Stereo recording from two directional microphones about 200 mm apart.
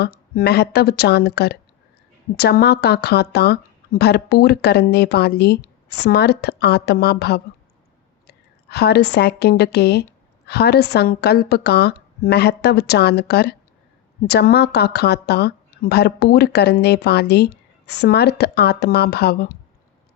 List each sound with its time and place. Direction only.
0.0 s a woman's voice: 55° left (ahead or behind)